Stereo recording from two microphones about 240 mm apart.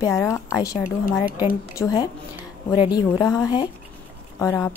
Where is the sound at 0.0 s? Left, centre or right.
Centre.